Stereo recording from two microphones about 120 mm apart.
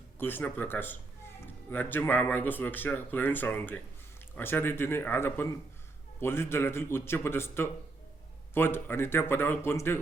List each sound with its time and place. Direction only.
0.2 s a man's voice: 15° left (ahead or behind)